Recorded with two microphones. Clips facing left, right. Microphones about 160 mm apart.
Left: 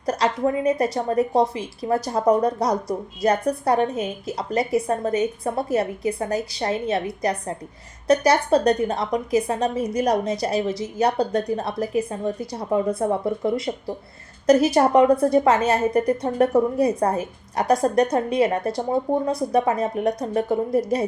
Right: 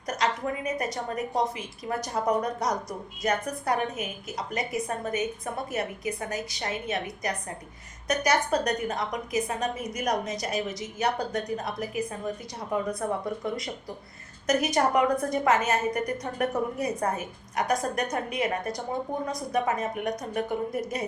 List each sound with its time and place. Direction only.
0.0 s a woman's voice: 35° left (ahead or behind)